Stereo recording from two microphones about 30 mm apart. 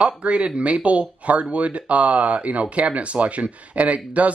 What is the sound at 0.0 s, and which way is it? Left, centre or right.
Speech, right.